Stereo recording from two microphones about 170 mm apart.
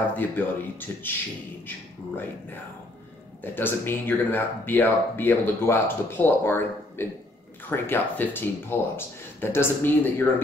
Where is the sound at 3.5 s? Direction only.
10° left (ahead or behind).